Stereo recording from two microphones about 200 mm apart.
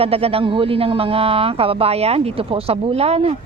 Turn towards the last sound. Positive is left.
turn(degrees=-30)  # may be behind; listen again after turning